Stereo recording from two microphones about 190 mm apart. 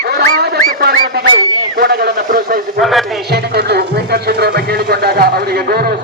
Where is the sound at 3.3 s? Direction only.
60° right (ahead or behind).